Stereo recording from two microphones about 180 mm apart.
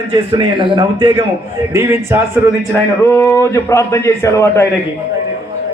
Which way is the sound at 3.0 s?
15° left (ahead or behind).